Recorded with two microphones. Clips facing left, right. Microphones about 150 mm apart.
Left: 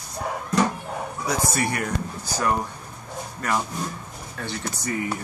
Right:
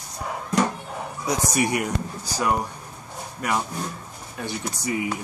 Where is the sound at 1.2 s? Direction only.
15° right (ahead or behind).